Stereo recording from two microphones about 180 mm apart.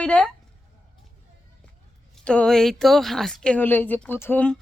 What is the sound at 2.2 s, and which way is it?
Speech, 5° left (ahead or behind).